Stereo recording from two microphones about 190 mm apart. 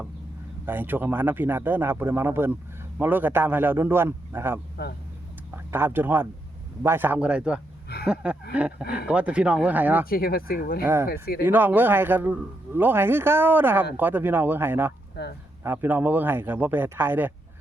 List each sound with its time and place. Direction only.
0.6 s a man's voice: 10° right (ahead or behind)
5.7 s a man's voice: 10° right (ahead or behind)
8.0 s a sound: 5° right (ahead or behind)
8.8 s speech: 55° left (ahead or behind)
9.0 s a man's voice: 5° right (ahead or behind)
10.1 s speech: 50° left (ahead or behind)
10.8 s a man's voice: 10° right (ahead or behind)
11.1 s speech: 50° left (ahead or behind)
11.4 s a man's voice: 10° right (ahead or behind)